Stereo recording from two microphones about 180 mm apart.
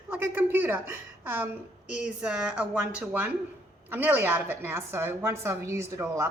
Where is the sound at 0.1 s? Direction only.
10° right (ahead or behind).